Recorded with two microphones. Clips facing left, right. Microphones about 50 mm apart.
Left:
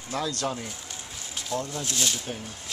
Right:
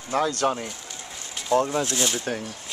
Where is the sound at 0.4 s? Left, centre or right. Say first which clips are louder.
Right 6 dB; right.